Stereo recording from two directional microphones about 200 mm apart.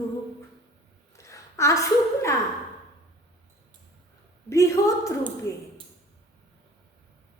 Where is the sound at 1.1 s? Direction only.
15° left (ahead or behind).